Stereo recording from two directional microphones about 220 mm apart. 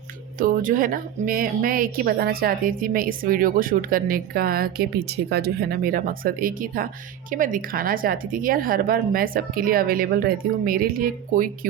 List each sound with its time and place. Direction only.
0.3 s speech: 40° right (ahead or behind)